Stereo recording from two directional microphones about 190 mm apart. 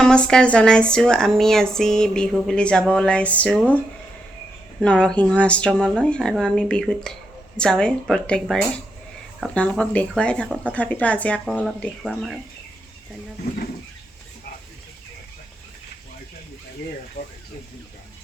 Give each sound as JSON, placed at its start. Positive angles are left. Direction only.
{"t": 0.0, "sound": "speech", "side_deg": 5}
{"t": 4.8, "sound": "speech", "side_deg": 5}
{"t": 9.6, "sound": "speech", "side_deg": 5}
{"t": 17.2, "sound": "a sound", "side_deg": 50}